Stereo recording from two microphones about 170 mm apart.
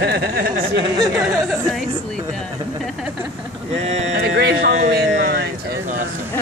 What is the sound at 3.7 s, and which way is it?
Speech, 40° right (ahead or behind).